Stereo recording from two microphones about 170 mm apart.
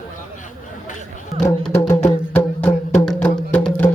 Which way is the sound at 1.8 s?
20° left (ahead or behind).